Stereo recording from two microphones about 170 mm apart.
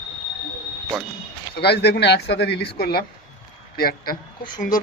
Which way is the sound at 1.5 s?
70° left (ahead or behind).